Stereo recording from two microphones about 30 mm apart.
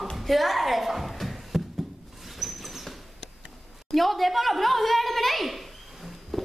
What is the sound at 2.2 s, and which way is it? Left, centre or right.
Rodents, centre.